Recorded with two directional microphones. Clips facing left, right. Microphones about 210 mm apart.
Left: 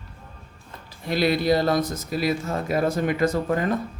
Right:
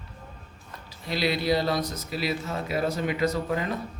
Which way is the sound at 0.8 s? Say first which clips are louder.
Left 5 dB; 50° left (ahead or behind).